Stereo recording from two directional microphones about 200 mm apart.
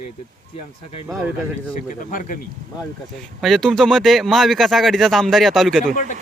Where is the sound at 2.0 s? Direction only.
45° left (ahead or behind).